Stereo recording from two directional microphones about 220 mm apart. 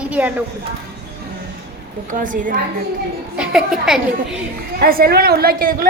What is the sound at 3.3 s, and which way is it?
Speech, centre (ahead or behind).